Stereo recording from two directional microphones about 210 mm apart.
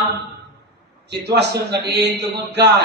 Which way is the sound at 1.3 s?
50° right (ahead or behind).